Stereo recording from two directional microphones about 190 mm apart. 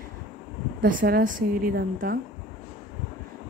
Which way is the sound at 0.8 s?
50° right (ahead or behind).